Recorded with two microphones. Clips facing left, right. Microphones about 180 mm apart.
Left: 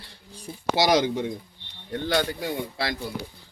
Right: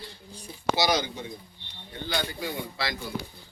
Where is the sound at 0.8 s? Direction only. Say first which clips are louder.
Left 8 dB; 90° left.